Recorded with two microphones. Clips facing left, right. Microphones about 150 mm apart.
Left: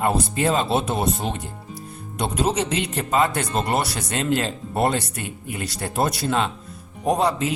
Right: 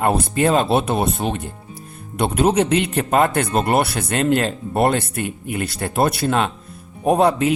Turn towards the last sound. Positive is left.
turn(degrees=-60)  # may be behind; listen again after turning